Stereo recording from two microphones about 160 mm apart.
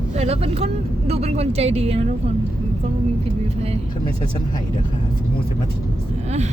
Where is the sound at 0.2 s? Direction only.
40° right (ahead or behind).